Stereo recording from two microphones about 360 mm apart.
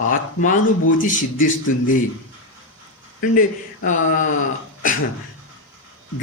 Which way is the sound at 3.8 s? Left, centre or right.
Left.